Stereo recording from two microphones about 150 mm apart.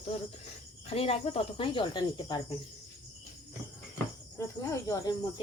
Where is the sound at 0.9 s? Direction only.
40° left (ahead or behind).